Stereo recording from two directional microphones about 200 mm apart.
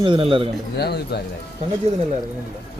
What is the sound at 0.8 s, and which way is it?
Speech, 55° left (ahead or behind).